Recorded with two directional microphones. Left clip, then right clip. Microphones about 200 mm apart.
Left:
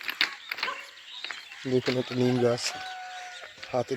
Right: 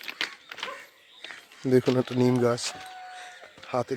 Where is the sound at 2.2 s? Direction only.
15° right (ahead or behind).